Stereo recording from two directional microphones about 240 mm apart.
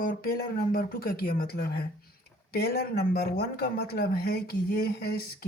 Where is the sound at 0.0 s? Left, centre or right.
Left.